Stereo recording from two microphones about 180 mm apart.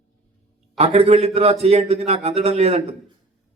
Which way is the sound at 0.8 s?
35° right (ahead or behind).